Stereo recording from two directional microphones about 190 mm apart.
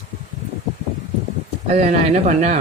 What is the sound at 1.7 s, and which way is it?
Speech, 35° right (ahead or behind).